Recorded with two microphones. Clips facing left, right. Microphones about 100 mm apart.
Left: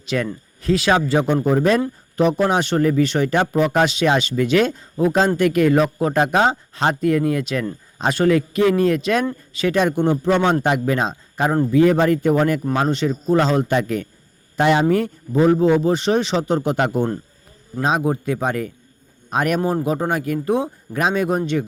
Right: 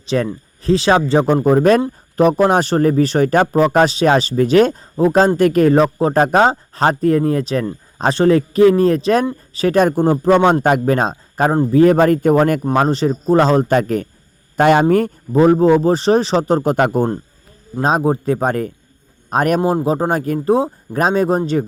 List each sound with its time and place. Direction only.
0.0 s speech: 30° right (ahead or behind); by 12.6 s 50° right (ahead or behind)
12.7 s speech: 35° right (ahead or behind)